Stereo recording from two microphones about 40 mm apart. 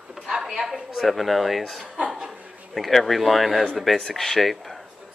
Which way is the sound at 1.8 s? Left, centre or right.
Right.